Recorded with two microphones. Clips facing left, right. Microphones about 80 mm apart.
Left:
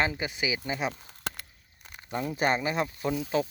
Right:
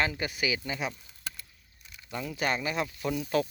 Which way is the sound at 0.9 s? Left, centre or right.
Left.